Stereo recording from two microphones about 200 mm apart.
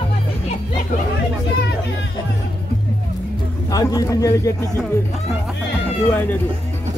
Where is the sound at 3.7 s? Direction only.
15° left (ahead or behind).